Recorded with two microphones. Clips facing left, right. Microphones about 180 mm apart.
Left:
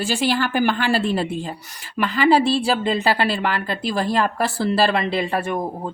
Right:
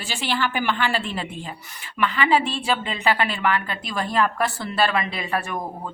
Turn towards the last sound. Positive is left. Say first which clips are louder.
# left 5 dB
turn(degrees=30)  # may be behind; listen again after turning